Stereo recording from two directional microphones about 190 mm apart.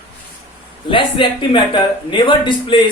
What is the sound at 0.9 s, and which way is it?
Speech, 25° left (ahead or behind).